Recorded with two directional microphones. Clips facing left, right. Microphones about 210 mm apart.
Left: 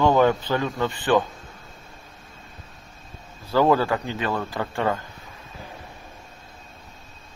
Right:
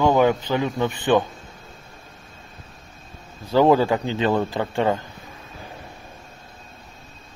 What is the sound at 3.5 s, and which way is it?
A man's voice, 20° right (ahead or behind).